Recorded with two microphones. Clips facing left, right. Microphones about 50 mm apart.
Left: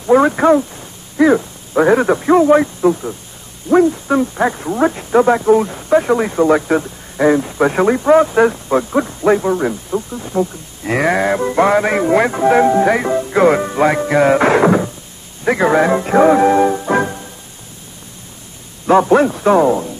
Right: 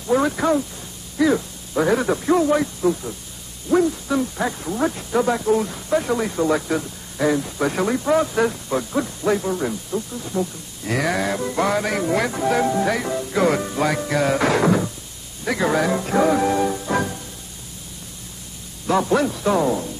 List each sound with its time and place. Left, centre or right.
0.0 s speech: left
18.9 s speech: left